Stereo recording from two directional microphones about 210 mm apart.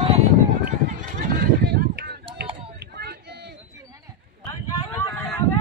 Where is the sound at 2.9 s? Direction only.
50° right (ahead or behind).